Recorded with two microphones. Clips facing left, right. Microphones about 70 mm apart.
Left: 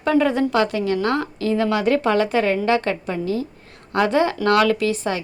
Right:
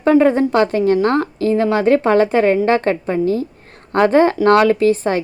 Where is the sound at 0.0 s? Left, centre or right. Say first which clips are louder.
Right 6 dB; right.